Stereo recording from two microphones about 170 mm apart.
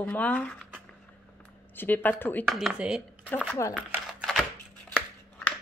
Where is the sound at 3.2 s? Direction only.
15° left (ahead or behind).